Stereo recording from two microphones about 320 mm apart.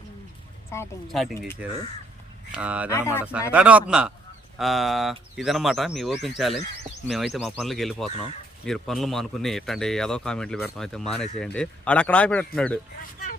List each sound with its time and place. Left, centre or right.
0.7 s speech: centre
2.9 s speech: centre
3.5 s speech: centre
8.1 s speech: centre
8.6 s speech: centre